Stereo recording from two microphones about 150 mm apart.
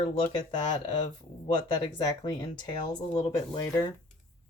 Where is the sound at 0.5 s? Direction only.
30° left (ahead or behind).